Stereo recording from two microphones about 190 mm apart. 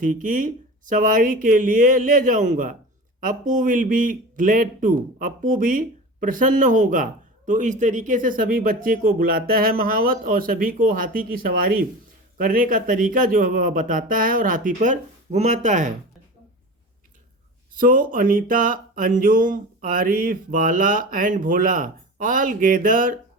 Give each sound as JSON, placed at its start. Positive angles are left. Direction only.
{"t": 0.0, "sound": "speech", "side_deg": -45}
{"t": 12.4, "sound": "speech", "side_deg": -45}
{"t": 17.7, "sound": "speech", "side_deg": -45}